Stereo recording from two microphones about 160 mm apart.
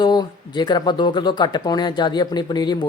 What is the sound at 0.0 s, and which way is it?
Speech, 25° left (ahead or behind).